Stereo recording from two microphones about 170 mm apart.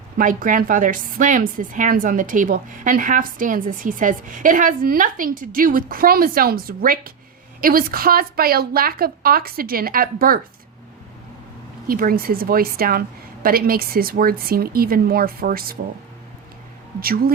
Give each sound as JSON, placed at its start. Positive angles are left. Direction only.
{"t": 0.2, "sound": "a woman's voice", "side_deg": -50}
{"t": 11.9, "sound": "a woman's voice", "side_deg": -60}
{"t": 17.0, "sound": "a woman's voice", "side_deg": -60}